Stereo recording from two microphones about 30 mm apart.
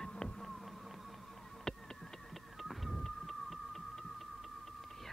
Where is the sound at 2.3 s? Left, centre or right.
Centre.